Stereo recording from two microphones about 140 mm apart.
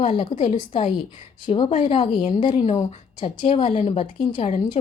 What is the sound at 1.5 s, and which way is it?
A woman's voice, 40° left (ahead or behind).